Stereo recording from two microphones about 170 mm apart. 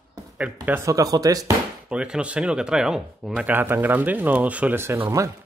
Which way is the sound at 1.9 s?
5° right (ahead or behind).